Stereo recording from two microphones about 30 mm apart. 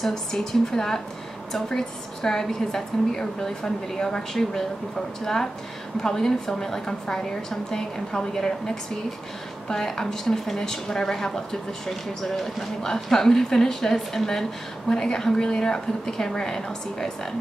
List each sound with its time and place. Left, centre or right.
0.0 s a woman's voice: centre